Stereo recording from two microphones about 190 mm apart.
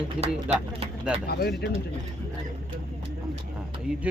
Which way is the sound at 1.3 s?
55° left (ahead or behind).